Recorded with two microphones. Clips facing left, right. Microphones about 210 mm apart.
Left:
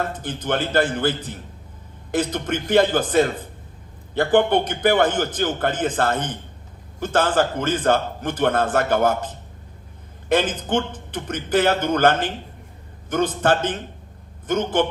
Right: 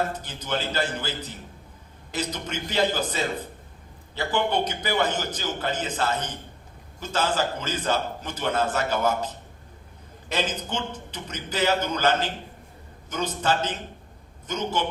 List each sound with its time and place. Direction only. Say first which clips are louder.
0.2 s a man's voice: left 6 dB; 55° left (ahead or behind)